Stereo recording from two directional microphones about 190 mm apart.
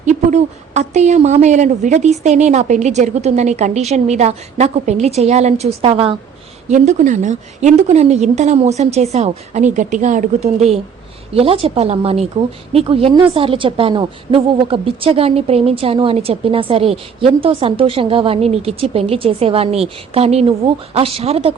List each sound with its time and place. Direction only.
0.0 s a woman's voice: 35° right (ahead or behind)